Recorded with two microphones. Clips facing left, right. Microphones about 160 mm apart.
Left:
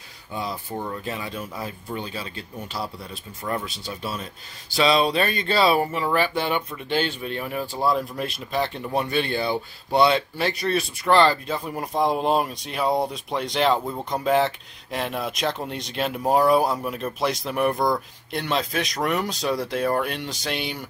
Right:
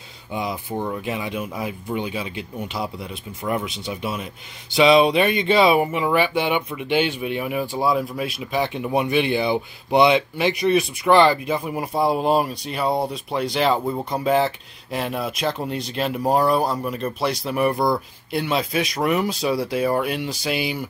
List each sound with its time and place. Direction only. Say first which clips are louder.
0.3 s speech: right 3 dB; 15° right (ahead or behind)